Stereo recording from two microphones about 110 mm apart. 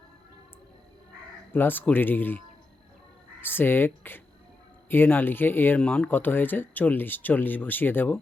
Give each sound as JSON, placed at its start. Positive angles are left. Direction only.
{"t": 1.5, "sound": "speech", "side_deg": 20}
{"t": 3.4, "sound": "speech", "side_deg": 20}